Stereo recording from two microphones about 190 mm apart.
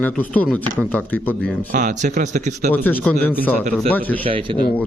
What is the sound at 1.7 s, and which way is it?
Speech, 40° right (ahead or behind).